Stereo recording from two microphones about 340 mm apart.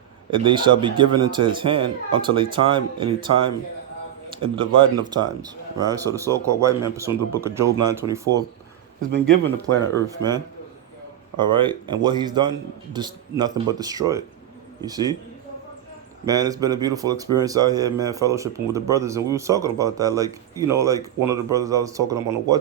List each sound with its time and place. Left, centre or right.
0.3 s speech: centre
9.7 s speech: right
11.3 s speech: centre
16.2 s speech: centre